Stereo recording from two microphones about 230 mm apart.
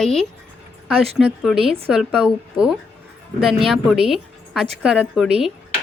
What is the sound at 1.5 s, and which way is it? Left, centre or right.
Speech, right.